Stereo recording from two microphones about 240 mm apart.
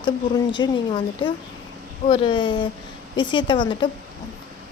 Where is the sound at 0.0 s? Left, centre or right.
Centre.